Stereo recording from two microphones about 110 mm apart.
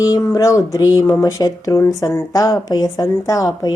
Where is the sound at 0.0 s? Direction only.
30° left (ahead or behind).